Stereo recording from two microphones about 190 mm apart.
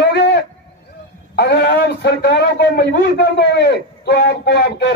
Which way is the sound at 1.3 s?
60° left (ahead or behind).